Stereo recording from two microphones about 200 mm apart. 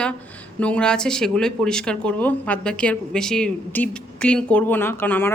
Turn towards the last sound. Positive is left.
turn(degrees=10)  # may be behind; listen again after turning